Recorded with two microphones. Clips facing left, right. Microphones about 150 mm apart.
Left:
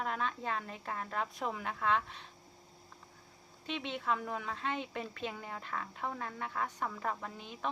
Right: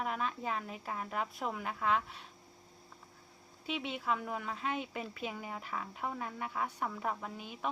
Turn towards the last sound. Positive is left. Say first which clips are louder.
# right 1 dB
turn(degrees=-10)  # may be behind; listen again after turning